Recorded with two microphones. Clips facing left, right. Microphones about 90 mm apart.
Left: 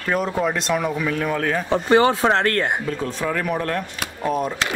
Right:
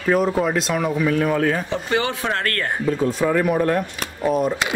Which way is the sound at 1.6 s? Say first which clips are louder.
Left 6 dB; 35° left (ahead or behind).